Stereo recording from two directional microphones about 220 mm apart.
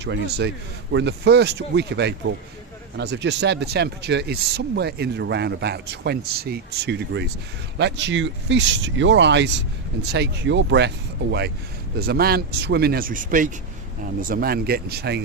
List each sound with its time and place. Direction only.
0.0 s speech: 50° right (ahead or behind)